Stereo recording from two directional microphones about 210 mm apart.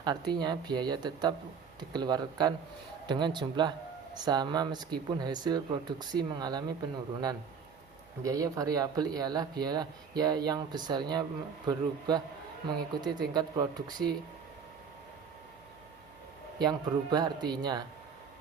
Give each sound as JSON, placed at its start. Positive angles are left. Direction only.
{"t": 0.0, "sound": "speech", "side_deg": -20}
{"t": 8.2, "sound": "speech", "side_deg": -15}
{"t": 16.6, "sound": "speech", "side_deg": -20}